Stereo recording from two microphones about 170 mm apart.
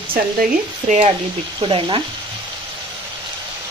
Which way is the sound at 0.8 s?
45° right (ahead or behind).